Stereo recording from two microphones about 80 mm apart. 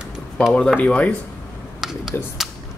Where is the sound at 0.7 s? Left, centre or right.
Centre.